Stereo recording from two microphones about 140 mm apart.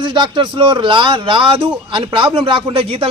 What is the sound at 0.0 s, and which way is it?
A man's voice, 35° right (ahead or behind).